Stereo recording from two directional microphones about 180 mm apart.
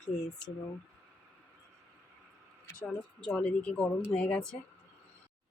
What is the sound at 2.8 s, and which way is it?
Speech, 5° left (ahead or behind).